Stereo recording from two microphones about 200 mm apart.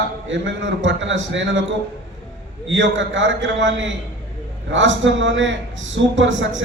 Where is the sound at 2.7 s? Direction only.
65° right (ahead or behind).